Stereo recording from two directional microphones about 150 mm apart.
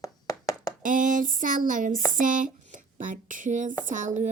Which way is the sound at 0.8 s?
60° right (ahead or behind).